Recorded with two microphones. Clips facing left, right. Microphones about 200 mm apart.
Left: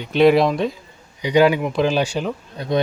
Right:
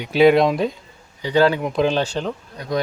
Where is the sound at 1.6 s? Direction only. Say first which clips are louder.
Even; centre (ahead or behind).